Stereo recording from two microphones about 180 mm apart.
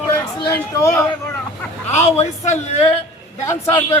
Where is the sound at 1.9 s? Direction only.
40° left (ahead or behind).